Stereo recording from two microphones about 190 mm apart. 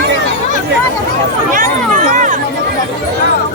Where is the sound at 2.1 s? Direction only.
40° right (ahead or behind).